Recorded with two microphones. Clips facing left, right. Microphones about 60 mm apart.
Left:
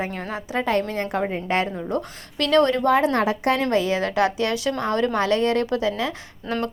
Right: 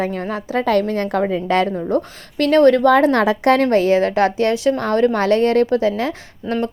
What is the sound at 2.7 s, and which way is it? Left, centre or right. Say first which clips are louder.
Speech: right 6 dB; right.